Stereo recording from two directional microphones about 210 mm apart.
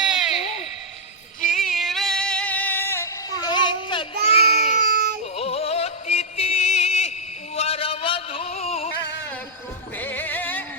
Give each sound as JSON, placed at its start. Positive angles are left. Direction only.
{"t": 0.0, "sound": "a sound", "side_deg": -5}
{"t": 1.5, "sound": "music", "side_deg": 0}
{"t": 4.9, "sound": "baby cry", "side_deg": -45}
{"t": 5.4, "sound": "music", "side_deg": 30}
{"t": 7.5, "sound": "a sound", "side_deg": 30}
{"t": 10.0, "sound": "music", "side_deg": 10}